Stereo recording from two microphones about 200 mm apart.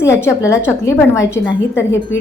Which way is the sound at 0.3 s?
15° left (ahead or behind).